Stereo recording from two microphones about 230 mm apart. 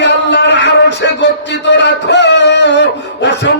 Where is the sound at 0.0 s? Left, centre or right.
Left.